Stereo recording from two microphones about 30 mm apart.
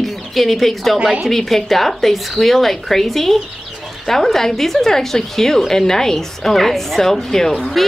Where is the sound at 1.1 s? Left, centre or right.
Centre.